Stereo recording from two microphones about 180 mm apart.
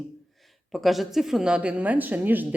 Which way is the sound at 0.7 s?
Centre (ahead or behind).